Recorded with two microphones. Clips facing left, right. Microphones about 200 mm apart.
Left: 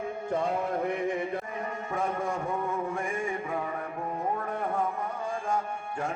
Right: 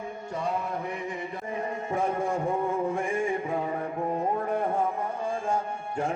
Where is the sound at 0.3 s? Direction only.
55° left (ahead or behind).